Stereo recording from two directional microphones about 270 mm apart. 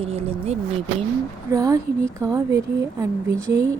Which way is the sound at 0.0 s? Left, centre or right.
Right.